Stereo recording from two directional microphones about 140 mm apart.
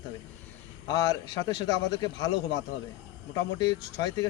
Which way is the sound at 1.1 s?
25° left (ahead or behind).